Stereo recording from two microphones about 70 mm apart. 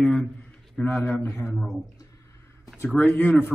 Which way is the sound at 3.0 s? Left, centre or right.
Left.